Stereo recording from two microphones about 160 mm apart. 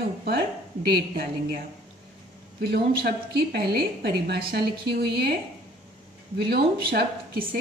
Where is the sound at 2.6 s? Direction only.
85° right.